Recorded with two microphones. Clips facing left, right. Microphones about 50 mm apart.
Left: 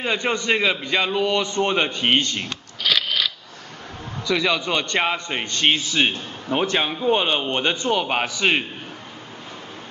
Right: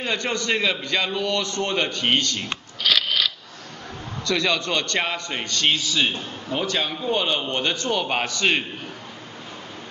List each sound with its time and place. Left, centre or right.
0.0 s a man's voice: centre
2.8 s scissors: centre
4.3 s a man's voice: centre